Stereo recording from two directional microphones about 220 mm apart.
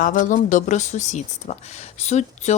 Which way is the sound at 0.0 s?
35° left (ahead or behind).